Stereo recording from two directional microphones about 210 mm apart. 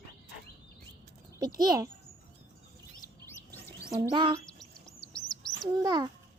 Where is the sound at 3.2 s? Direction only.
10° left (ahead or behind).